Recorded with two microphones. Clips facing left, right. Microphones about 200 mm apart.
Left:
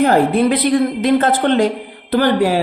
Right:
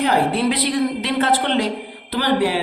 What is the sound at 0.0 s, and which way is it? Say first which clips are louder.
Speech: left 5 dB; 50° left (ahead or behind).